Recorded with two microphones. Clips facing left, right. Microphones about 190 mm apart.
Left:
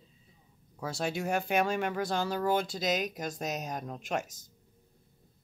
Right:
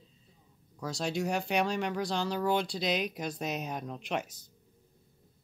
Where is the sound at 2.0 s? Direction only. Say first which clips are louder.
Left 1 dB; 55° left (ahead or behind).